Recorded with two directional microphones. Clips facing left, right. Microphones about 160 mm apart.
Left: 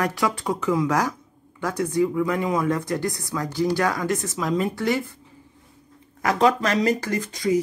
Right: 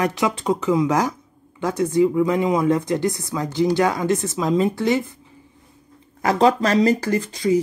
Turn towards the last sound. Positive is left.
turn(degrees=-30)  # may be behind; listen again after turning